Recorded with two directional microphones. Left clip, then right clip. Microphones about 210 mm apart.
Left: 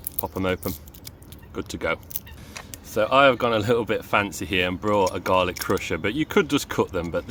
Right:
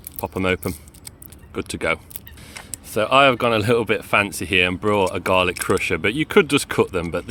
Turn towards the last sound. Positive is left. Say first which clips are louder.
# right 4 dB
turn(degrees=-40)  # may be behind; listen again after turning